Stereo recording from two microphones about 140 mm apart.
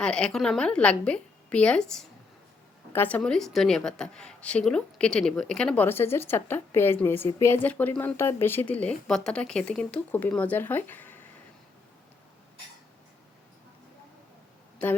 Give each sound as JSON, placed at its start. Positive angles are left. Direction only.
{"t": 0.0, "sound": "a woman's voice", "side_deg": 5}